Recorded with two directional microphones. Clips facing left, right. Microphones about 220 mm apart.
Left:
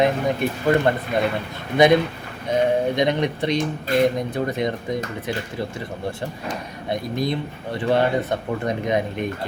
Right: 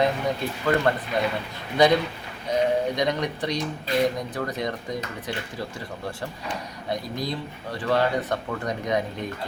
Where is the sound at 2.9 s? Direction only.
25° left (ahead or behind).